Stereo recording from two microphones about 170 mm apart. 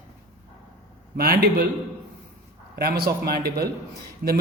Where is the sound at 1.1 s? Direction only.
65° right (ahead or behind).